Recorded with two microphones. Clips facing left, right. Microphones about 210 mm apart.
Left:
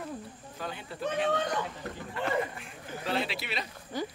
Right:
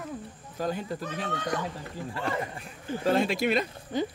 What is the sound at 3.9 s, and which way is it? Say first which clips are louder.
Speech: right 5 dB; 20° right (ahead or behind).